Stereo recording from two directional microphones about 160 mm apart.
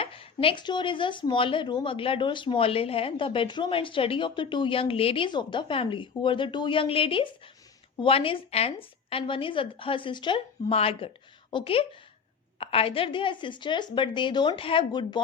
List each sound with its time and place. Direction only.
0.0 s speech: 35° left (ahead or behind)